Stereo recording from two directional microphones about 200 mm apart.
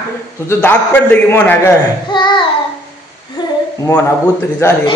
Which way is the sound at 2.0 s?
25° left (ahead or behind).